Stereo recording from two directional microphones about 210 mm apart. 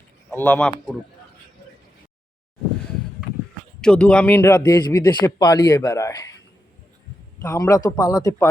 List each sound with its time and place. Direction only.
0.3 s speech: 10° left (ahead or behind)
3.8 s speech: 5° left (ahead or behind)
7.4 s speech: 15° left (ahead or behind)